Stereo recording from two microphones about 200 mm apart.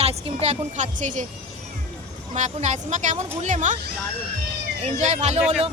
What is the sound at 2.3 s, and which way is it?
A woman's voice, 35° right (ahead or behind).